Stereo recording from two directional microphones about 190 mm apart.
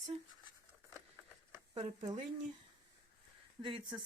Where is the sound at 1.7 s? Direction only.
30° right (ahead or behind).